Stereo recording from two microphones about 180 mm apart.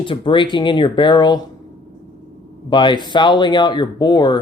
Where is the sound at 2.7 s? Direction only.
25° left (ahead or behind).